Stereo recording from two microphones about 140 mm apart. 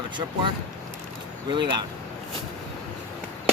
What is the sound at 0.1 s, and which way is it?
Speech, 35° right (ahead or behind).